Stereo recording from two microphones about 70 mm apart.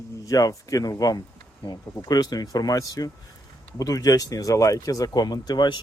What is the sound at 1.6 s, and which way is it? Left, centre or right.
Speech, left.